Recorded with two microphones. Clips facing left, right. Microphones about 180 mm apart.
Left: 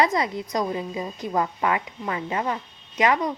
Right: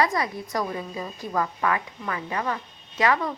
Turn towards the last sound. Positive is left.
turn(degrees=20)  # may be behind; listen again after turning